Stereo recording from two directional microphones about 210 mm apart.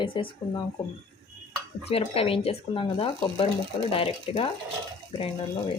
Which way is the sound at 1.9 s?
25° left (ahead or behind).